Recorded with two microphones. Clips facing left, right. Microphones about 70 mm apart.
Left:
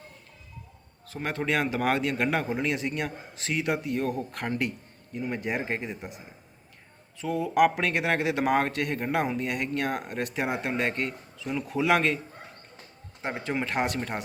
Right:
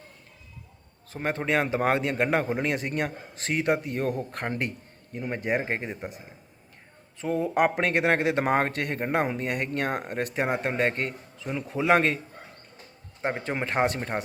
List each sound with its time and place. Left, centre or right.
1.0 s speech: right
7.2 s speech: right
13.2 s speech: right